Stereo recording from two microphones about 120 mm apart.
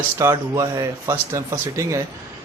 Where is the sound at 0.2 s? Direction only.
25° right (ahead or behind).